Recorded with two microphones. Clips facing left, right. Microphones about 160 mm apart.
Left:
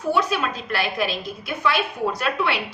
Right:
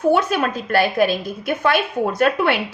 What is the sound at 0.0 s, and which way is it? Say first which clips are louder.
A woman's voice: right 5 dB; 55° right (ahead or behind).